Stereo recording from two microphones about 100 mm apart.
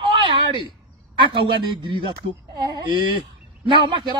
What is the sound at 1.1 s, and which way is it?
Speech, 55° right (ahead or behind).